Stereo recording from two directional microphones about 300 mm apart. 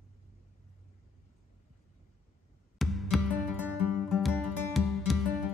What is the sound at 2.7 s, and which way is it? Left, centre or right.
Music, centre.